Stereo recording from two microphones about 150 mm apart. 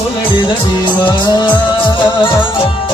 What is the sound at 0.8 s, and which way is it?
Music, 30° left (ahead or behind).